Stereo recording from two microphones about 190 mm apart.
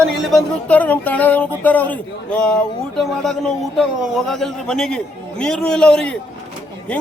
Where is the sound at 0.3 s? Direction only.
5° left (ahead or behind).